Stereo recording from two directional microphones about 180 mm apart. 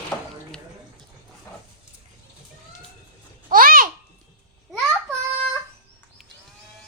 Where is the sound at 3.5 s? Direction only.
50° right (ahead or behind).